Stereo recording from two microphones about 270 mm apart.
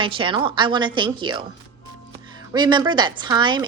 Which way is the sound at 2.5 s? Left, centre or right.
Centre.